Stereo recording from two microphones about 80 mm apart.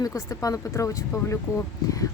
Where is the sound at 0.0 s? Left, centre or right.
Left.